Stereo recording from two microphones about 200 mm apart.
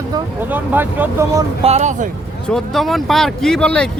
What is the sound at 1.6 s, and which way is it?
Speech, 35° right (ahead or behind).